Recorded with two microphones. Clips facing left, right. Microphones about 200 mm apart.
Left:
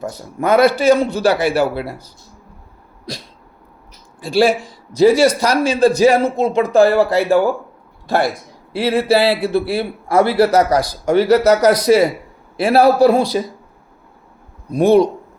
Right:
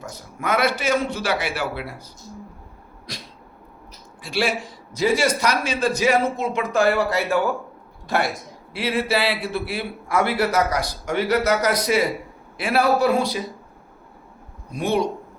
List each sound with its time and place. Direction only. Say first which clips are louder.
0.0 s a man's voice: left 9 dB; 35° left (ahead or behind)
4.2 s a man's voice: left 9 dB; 35° left (ahead or behind)
14.8 s a man's voice: left 11 dB; 35° left (ahead or behind)